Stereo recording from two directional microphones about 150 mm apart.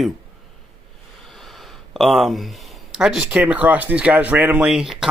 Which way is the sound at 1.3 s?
Centre (ahead or behind).